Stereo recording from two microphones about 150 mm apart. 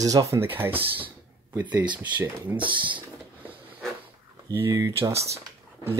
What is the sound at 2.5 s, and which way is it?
Speech, 30° right (ahead or behind).